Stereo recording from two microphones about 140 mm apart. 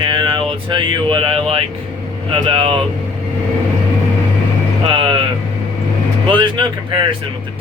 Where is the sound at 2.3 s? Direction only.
40° right (ahead or behind).